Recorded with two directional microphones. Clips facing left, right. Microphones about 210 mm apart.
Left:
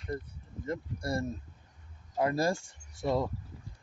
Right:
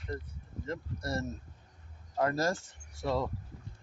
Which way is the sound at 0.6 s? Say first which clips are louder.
Left 3 dB; 10° left (ahead or behind).